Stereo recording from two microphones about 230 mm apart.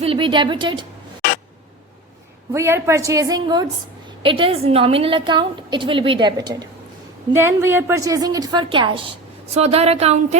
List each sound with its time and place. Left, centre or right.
0.0 s a woman's voice: right
2.5 s a woman's voice: centre; by 10.3 s right